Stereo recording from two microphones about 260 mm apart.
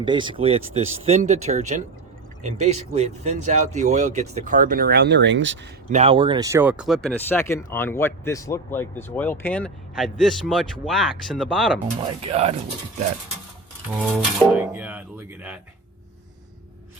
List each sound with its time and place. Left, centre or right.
0.0 s speech: centre; by 5.5 s right
5.9 s speech: right; by 11.5 s centre
12.2 s speech: right
14.0 s a sound: centre